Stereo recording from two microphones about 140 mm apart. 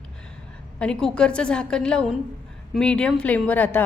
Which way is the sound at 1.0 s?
5° left (ahead or behind).